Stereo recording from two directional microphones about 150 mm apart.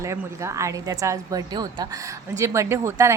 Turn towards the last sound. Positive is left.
turn(degrees=-20)  # may be behind; listen again after turning